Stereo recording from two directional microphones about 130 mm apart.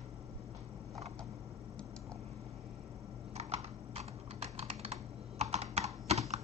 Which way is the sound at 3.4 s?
55° right (ahead or behind).